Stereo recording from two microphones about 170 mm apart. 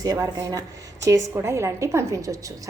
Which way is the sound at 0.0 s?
20° right (ahead or behind).